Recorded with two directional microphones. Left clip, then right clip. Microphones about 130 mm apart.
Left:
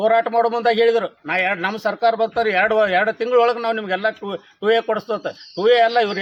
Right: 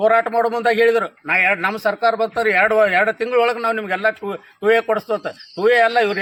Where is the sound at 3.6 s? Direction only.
30° left (ahead or behind).